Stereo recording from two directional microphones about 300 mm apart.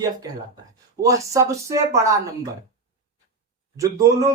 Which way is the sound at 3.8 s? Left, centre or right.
Centre.